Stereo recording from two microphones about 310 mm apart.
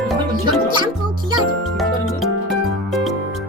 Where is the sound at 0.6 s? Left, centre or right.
Centre.